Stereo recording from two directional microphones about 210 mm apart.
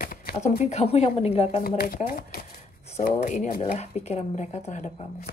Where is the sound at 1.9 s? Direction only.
45° left (ahead or behind).